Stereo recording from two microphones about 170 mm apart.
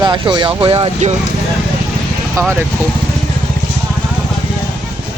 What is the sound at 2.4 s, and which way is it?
Speech, 20° right (ahead or behind).